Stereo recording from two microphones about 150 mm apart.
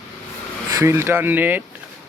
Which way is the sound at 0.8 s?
20° right (ahead or behind).